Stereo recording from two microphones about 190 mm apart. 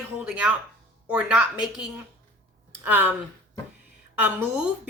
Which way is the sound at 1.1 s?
5° right (ahead or behind).